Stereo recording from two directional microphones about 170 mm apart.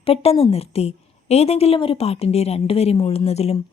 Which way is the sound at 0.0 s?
35° left (ahead or behind).